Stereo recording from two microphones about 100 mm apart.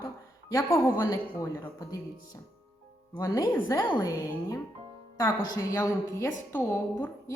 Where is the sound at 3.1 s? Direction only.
35° left (ahead or behind).